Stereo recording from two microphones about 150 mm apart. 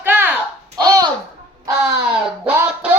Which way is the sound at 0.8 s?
25° right (ahead or behind).